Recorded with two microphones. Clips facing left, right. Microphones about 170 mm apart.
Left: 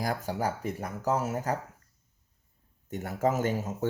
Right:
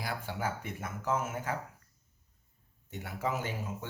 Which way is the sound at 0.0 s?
40° left (ahead or behind).